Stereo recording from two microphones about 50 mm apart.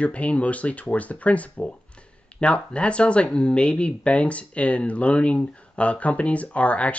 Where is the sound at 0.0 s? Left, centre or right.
Left.